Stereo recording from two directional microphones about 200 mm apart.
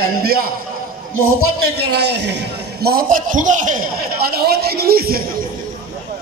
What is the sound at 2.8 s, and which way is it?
A man's voice, 45° right (ahead or behind).